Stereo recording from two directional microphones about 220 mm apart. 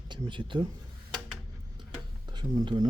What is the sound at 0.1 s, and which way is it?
Speech, 20° right (ahead or behind).